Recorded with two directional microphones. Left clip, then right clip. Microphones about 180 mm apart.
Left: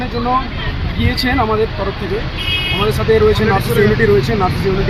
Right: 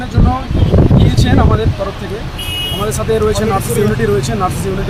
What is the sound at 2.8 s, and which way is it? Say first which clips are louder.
Speech: left 2 dB; 20° right (ahead or behind).